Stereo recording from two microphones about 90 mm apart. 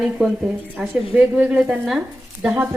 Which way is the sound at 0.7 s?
15° right (ahead or behind).